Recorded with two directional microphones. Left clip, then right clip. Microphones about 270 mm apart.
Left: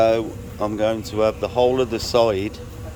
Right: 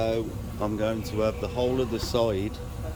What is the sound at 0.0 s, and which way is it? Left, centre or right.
Speech, centre.